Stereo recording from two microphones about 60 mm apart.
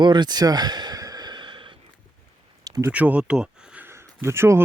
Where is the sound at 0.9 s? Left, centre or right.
Right.